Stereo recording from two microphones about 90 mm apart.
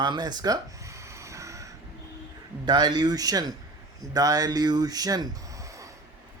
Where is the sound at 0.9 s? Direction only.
35° right (ahead or behind).